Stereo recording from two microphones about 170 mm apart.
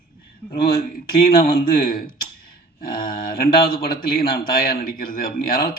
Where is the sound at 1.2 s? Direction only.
60° left (ahead or behind).